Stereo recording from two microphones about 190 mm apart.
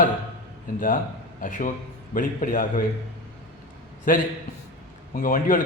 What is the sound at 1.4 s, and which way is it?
A man's voice, 45° left (ahead or behind).